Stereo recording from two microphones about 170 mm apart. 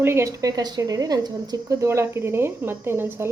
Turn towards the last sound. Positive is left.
turn(degrees=-15)  # may be behind; listen again after turning